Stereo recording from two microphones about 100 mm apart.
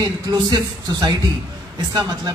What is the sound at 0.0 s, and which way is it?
A man's voice, 40° right (ahead or behind).